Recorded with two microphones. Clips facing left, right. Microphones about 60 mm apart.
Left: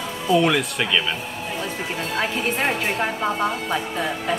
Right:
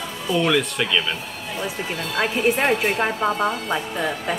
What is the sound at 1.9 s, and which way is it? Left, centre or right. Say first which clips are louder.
Speech: even; left.